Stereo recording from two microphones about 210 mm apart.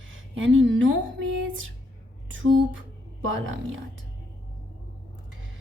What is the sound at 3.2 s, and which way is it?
Speech, 65° right (ahead or behind).